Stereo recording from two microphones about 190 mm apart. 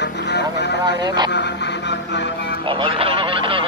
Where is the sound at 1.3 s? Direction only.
65° left (ahead or behind).